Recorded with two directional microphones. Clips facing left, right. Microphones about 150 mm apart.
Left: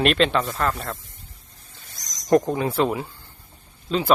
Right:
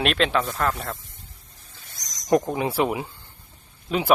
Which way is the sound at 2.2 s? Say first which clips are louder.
Left 2 dB; 10° right (ahead or behind).